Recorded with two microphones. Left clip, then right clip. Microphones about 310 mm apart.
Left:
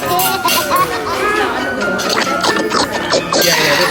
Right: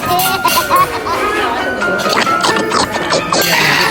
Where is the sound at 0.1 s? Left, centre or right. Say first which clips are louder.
Right 2 dB; centre.